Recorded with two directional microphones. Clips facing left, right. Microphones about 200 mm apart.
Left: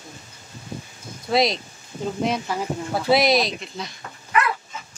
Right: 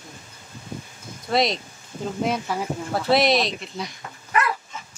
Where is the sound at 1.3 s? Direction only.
Centre (ahead or behind).